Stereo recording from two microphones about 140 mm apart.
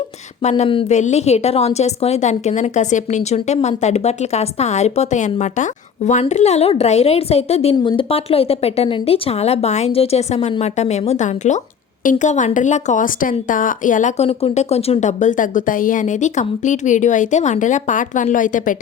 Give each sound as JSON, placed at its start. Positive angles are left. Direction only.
{"t": 0.4, "sound": "a woman's voice", "side_deg": 50}
{"t": 14.3, "sound": "a woman's voice", "side_deg": 50}